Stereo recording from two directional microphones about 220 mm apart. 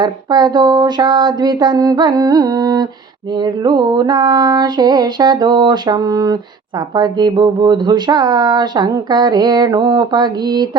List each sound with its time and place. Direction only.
0.0 s speech: 20° right (ahead or behind)